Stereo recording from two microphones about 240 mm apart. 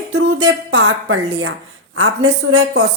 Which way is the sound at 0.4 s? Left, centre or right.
Right.